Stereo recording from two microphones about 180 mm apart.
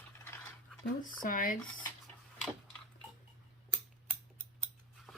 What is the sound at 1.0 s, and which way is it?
Speech, 50° left (ahead or behind).